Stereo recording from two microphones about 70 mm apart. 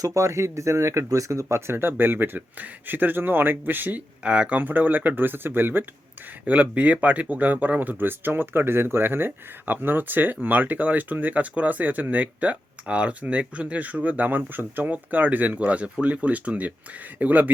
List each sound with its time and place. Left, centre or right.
0.0 s speech: right
4.2 s speech: centre
6.4 s speech: right